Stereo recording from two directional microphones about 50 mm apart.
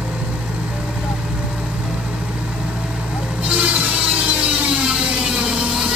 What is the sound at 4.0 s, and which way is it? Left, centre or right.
Ratchet, right.